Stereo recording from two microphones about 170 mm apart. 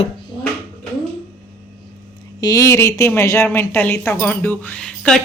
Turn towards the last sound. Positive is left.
turn(degrees=5)  # may be behind; listen again after turning